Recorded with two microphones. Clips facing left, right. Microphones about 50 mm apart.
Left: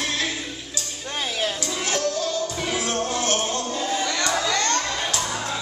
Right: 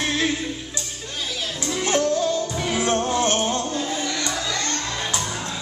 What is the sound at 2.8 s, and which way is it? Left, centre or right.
Music, right.